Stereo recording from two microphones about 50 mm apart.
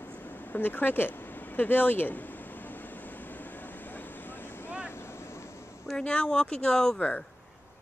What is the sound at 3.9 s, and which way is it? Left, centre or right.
Vehicle, left.